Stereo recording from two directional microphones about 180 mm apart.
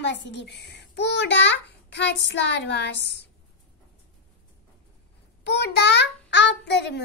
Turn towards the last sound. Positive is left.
turn(degrees=75)  # may be behind; listen again after turning